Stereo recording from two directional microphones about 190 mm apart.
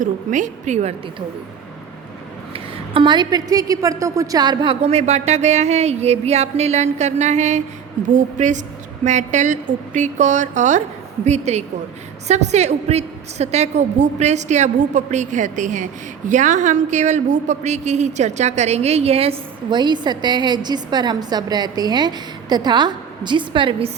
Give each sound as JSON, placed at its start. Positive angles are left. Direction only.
{"t": 0.0, "sound": "a woman's voice", "side_deg": -40}
{"t": 2.5, "sound": "a woman's voice", "side_deg": -30}